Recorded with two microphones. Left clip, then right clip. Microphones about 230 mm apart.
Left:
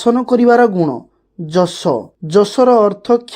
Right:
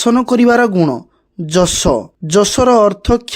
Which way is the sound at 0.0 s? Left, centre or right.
Right.